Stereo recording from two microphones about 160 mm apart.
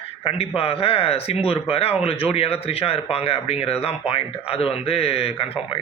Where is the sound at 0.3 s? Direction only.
40° left (ahead or behind).